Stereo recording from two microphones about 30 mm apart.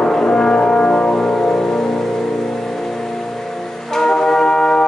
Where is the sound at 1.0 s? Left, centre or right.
Centre.